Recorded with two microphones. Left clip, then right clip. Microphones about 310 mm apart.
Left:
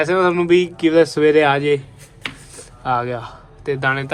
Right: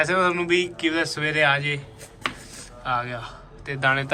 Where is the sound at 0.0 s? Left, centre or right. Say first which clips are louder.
Left 5 dB; centre.